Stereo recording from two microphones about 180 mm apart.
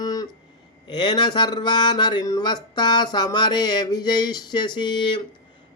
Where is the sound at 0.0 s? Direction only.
20° left (ahead or behind).